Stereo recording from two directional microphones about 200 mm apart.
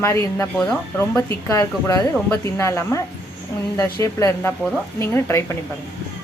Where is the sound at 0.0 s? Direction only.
15° left (ahead or behind).